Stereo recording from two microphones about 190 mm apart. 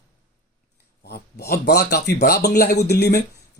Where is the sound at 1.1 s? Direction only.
55° left (ahead or behind).